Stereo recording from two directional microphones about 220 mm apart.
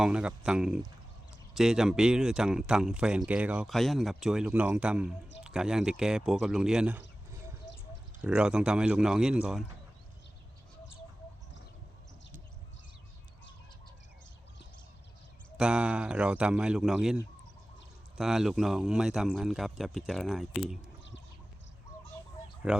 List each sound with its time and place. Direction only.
0.0 s speech: 5° right (ahead or behind)
7.6 s a sound: 55° left (ahead or behind)
8.2 s speech: 5° right (ahead or behind)
15.5 s speech: 5° right (ahead or behind)
18.2 s speech: centre (ahead or behind)
22.7 s speech: 5° right (ahead or behind)